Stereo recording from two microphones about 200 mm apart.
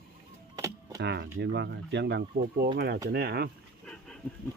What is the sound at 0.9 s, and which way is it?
Speech, 60° right (ahead or behind).